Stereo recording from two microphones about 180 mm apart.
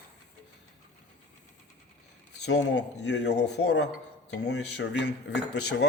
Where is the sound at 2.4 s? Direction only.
75° left (ahead or behind).